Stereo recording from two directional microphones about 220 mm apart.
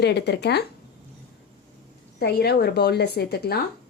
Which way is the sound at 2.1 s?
45° left (ahead or behind).